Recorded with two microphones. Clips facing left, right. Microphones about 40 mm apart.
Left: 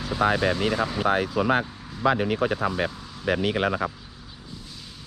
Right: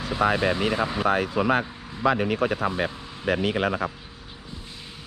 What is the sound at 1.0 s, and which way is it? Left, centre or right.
Speech, right.